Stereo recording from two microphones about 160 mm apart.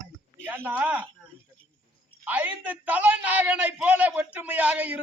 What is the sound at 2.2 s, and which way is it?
A man's voice, 10° right (ahead or behind).